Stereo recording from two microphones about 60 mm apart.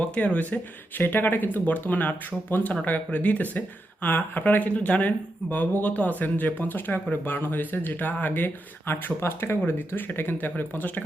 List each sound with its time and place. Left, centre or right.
0.0 s speech: left